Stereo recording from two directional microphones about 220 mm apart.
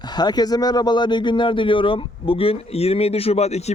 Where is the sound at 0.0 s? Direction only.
20° left (ahead or behind).